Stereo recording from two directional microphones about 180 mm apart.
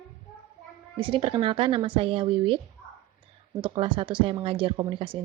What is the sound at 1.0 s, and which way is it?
Speech, 30° right (ahead or behind).